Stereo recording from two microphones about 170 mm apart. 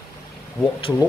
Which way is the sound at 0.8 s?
30° left (ahead or behind).